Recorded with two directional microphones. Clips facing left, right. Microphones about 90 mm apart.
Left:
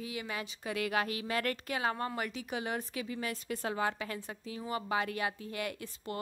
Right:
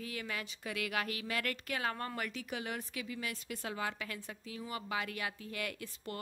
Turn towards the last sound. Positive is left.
turn(degrees=25)  # may be behind; listen again after turning